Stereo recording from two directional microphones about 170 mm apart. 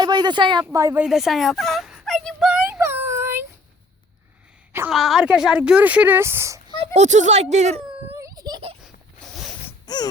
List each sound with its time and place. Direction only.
0.0 s speech: 25° right (ahead or behind)
1.0 s whimper: centre (ahead or behind)
4.9 s speech: centre (ahead or behind); by 6.7 s 15° right (ahead or behind)
6.7 s speech: 40° right (ahead or behind)
8.2 s a sound: 20° right (ahead or behind)
8.8 s zipper: centre (ahead or behind)
9.8 s a sound: 25° left (ahead or behind)